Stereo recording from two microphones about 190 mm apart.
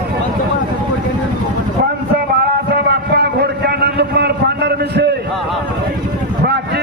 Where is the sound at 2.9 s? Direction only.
60° right (ahead or behind).